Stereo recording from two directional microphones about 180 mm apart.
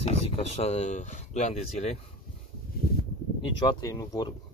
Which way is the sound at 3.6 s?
20° left (ahead or behind).